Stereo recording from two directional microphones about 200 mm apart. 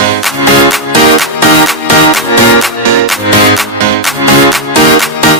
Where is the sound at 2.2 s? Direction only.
Centre (ahead or behind).